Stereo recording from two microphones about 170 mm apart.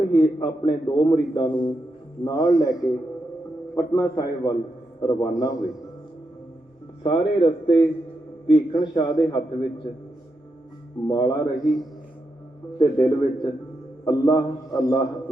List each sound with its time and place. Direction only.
0.3 s a man's voice: 25° left (ahead or behind)
3.8 s a man's voice: 15° left (ahead or behind)
7.0 s a man's voice: 30° left (ahead or behind)
11.1 s a man's voice: 20° left (ahead or behind)
12.8 s a man's voice: 20° left (ahead or behind)